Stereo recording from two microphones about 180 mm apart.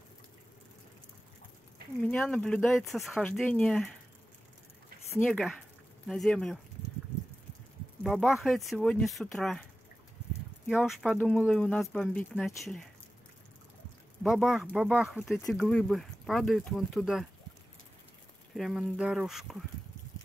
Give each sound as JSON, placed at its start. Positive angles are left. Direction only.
{"t": 2.0, "sound": "speech", "side_deg": 5}
{"t": 5.1, "sound": "speech", "side_deg": 5}
{"t": 8.0, "sound": "speech", "side_deg": -5}
{"t": 10.8, "sound": "speech", "side_deg": 0}
{"t": 14.2, "sound": "speech", "side_deg": -5}
{"t": 18.5, "sound": "speech", "side_deg": 0}